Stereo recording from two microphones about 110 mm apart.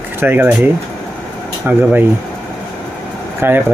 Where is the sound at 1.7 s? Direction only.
15° right (ahead or behind).